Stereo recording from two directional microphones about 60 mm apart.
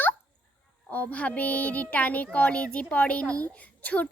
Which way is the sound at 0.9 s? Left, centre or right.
Left.